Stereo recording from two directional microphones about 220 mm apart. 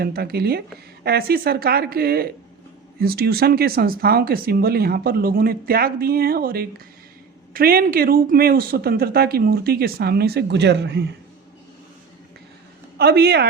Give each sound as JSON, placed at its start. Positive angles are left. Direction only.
{"t": 0.0, "sound": "speech", "side_deg": -45}
{"t": 13.0, "sound": "speech", "side_deg": -45}